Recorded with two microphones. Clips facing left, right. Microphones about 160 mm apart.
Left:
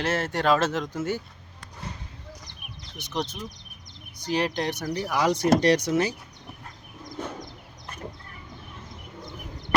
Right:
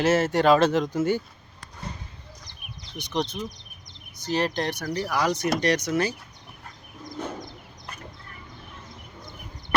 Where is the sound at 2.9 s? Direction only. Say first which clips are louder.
Right 3 dB; 5° left (ahead or behind); by 5.9 s 30° left (ahead or behind).